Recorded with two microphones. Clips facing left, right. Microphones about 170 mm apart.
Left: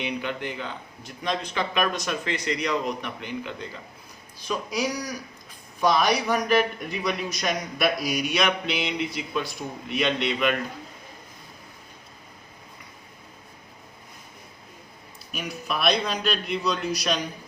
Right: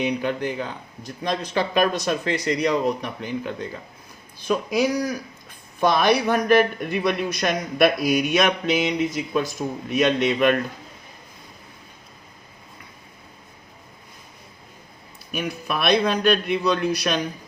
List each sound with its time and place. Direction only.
0.0 s speech: 40° right (ahead or behind)
4.4 s a man's voice: 55° right (ahead or behind)
15.3 s a man's voice: 55° right (ahead or behind)